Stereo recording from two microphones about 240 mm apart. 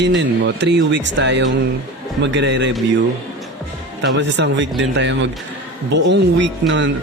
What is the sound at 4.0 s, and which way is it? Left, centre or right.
Speech, right.